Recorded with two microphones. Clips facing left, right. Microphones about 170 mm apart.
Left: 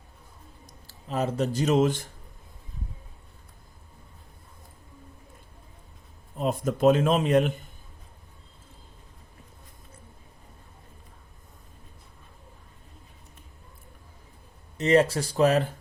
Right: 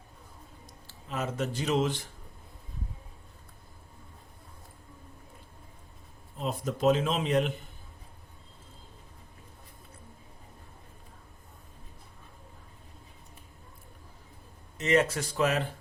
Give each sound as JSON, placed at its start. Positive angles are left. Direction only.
{"t": 0.9, "sound": "speech", "side_deg": 35}
{"t": 6.3, "sound": "speech", "side_deg": 50}
{"t": 14.8, "sound": "speech", "side_deg": 35}